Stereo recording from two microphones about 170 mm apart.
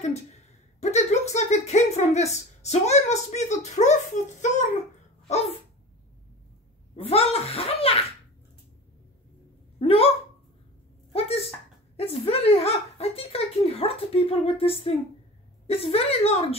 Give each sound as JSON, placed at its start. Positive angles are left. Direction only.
{"t": 0.7, "sound": "a woman's voice", "side_deg": 40}
{"t": 7.0, "sound": "a woman's voice", "side_deg": 35}
{"t": 9.8, "sound": "speech", "side_deg": 35}
{"t": 11.1, "sound": "a sound", "side_deg": 35}
{"t": 12.0, "sound": "a woman's voice", "side_deg": 35}